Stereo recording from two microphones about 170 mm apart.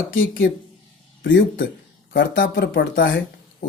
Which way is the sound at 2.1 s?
75° left (ahead or behind).